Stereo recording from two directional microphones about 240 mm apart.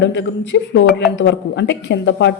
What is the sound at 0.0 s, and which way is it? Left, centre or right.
Speech, left.